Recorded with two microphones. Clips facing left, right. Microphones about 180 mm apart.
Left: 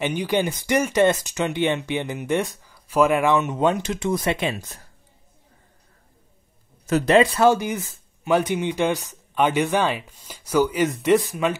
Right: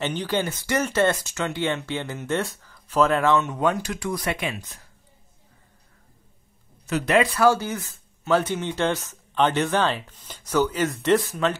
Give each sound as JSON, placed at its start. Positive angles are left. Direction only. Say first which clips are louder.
{"t": 0.0, "sound": "speech", "louder": "left 3 dB", "side_deg": 10}
{"t": 6.9, "sound": "speech", "louder": "left 5 dB", "side_deg": 45}
{"t": 7.2, "sound": "speech", "louder": "left 2 dB", "side_deg": 20}